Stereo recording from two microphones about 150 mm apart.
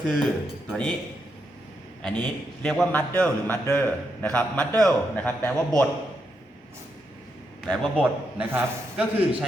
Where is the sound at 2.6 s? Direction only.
5° left (ahead or behind).